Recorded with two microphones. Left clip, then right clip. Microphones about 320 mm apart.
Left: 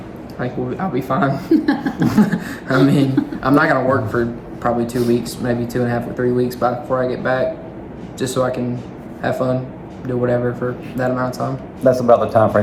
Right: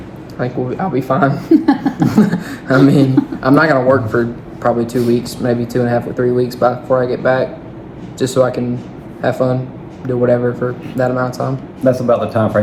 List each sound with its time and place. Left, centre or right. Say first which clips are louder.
0.3 s a man's voice: right 4 dB; centre
2.0 s a man's voice: even; centre
11.9 s speech: left 1 dB; left